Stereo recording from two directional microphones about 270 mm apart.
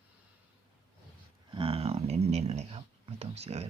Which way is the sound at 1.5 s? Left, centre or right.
Centre.